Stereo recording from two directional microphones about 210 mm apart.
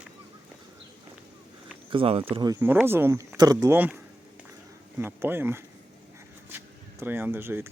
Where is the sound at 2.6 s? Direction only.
10° right (ahead or behind).